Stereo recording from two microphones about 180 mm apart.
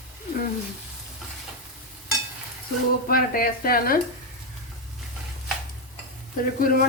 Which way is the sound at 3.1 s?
55° left (ahead or behind).